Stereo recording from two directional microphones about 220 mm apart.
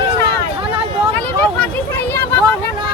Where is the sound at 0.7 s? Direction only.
25° right (ahead or behind).